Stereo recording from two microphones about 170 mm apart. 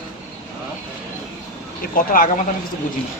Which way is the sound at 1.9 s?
55° left (ahead or behind).